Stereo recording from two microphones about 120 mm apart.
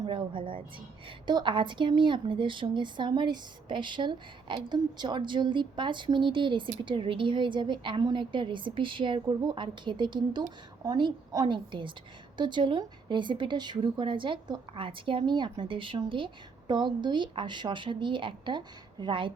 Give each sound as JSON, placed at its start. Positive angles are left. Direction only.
{"t": 0.0, "sound": "a woman's voice", "side_deg": -45}